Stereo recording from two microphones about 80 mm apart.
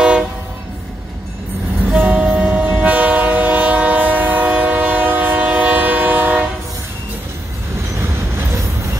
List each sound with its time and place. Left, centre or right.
2.0 s train: centre
8.0 s vehicle: right